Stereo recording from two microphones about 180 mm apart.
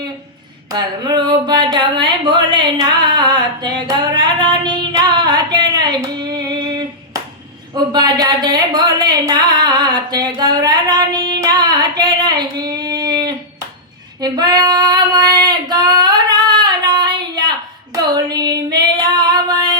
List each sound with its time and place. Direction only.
0.7 s a sound: 25° right (ahead or behind)
7.7 s a woman's voice: 20° right (ahead or behind)
14.2 s female singing: 20° right (ahead or behind)
17.9 s child singing: 20° right (ahead or behind)